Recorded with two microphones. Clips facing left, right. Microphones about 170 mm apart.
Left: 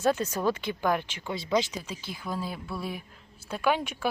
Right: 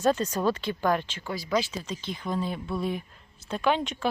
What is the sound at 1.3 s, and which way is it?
Speech, 25° left (ahead or behind).